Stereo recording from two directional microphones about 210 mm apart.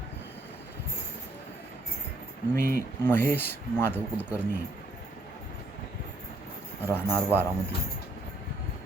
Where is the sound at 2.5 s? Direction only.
45° right (ahead or behind).